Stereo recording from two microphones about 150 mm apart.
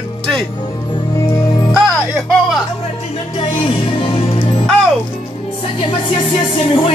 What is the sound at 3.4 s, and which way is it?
Music, 35° left (ahead or behind).